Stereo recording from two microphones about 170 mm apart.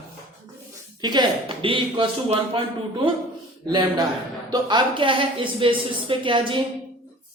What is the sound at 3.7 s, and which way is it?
Speech, 25° right (ahead or behind).